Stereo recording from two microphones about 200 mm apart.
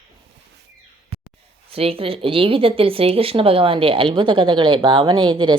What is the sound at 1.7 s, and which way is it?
Speech, 30° right (ahead or behind).